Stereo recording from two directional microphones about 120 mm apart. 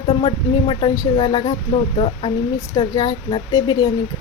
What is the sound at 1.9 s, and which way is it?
Speech, 50° left (ahead or behind).